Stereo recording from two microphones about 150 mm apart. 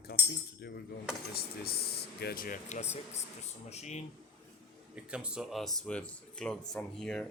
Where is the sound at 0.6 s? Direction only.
90° left; by 4.0 s 45° left (ahead or behind).